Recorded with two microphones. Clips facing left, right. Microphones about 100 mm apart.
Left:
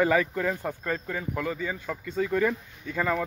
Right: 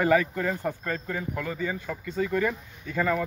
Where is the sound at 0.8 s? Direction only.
10° left (ahead or behind).